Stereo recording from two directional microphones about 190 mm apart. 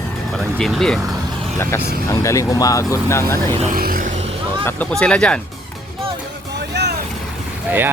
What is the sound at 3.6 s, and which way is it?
Vehicle, 45° right (ahead or behind).